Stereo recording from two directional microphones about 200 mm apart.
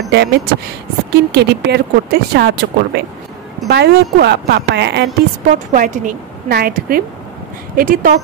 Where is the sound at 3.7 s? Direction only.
55° right (ahead or behind).